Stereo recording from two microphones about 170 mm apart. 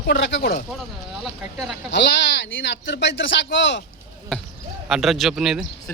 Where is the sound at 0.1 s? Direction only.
90° left.